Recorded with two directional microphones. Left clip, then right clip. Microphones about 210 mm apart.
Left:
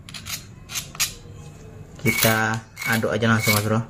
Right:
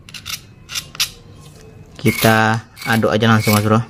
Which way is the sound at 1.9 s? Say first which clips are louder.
Right 6 dB; 50° right (ahead or behind).